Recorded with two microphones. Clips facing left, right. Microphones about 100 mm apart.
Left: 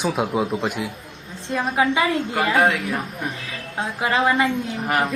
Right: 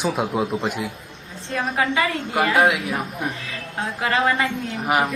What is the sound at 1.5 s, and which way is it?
Speech, 15° left (ahead or behind).